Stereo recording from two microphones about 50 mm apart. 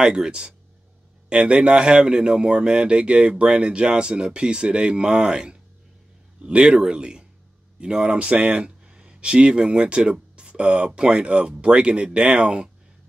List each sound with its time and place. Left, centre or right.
0.0 s speech: centre